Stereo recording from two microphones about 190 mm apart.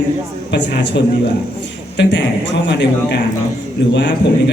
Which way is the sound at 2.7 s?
65° left (ahead or behind).